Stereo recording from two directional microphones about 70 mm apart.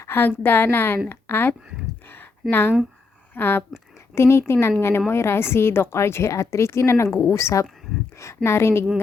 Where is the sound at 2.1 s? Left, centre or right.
Left.